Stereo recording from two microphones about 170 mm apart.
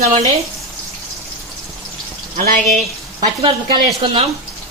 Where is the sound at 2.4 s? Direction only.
55° right (ahead or behind).